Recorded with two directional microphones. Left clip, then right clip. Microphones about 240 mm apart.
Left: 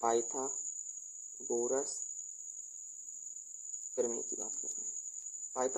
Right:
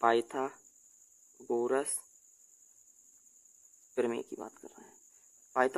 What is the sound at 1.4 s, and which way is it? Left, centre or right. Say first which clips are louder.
Speech: right 3 dB; right.